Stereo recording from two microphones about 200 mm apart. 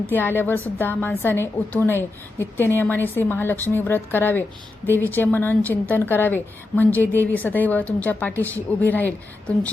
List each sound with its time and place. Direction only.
0.1 s a woman's voice: 10° left (ahead or behind)